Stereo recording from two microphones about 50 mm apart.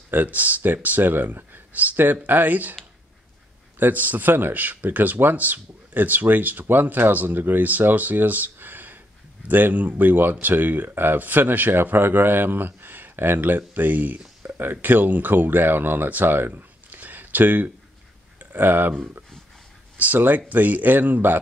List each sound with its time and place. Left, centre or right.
0.1 s speech: right
3.8 s speech: right
20.0 s speech: right